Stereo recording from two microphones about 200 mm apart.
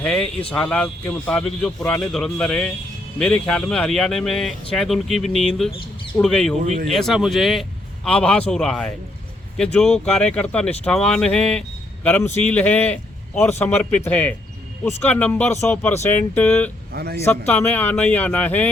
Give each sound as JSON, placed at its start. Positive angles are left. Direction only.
{"t": 0.0, "sound": "a man's voice", "side_deg": 5}
{"t": 16.9, "sound": "a man's voice", "side_deg": -50}
{"t": 17.2, "sound": "a man's voice", "side_deg": 10}